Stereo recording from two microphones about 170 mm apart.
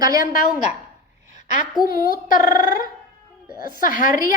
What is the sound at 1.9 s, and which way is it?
Speech, 55° left (ahead or behind).